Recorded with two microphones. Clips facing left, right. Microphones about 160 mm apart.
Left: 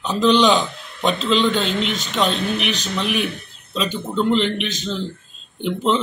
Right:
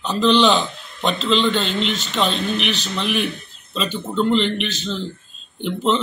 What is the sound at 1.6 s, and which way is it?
Speech, 50° left (ahead or behind).